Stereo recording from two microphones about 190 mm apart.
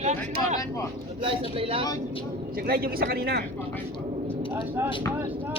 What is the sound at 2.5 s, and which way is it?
Speech, 50° right (ahead or behind).